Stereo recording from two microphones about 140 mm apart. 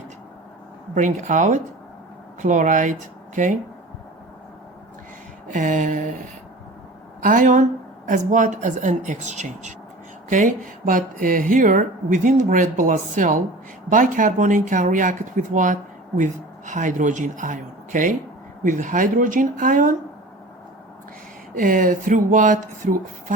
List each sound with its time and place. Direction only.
0.9 s speech: 65° right (ahead or behind)
5.5 s speech: 65° right (ahead or behind)
7.2 s speech: 70° right (ahead or behind)
21.5 s speech: 70° right (ahead or behind)